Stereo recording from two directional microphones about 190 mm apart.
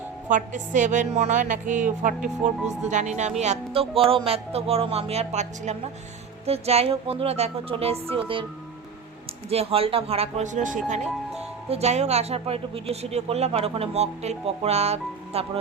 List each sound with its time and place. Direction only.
0.3 s speech: 40° right (ahead or behind)
9.5 s speech: 30° right (ahead or behind)